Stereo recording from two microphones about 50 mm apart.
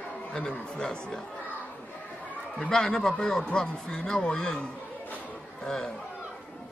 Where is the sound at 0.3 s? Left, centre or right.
Centre.